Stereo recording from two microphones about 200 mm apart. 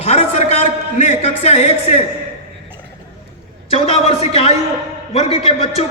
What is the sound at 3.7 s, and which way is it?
A man's voice, 30° left (ahead or behind).